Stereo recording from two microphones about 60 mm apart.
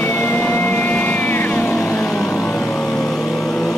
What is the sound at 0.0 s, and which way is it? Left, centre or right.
Vehicle, left.